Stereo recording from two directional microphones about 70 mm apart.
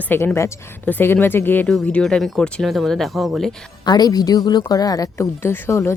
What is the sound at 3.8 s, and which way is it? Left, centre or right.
A woman's voice, left.